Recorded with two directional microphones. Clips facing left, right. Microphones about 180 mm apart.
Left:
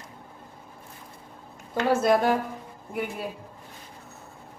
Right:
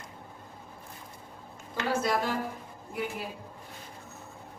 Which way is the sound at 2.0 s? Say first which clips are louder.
Left 7 dB; 60° left (ahead or behind).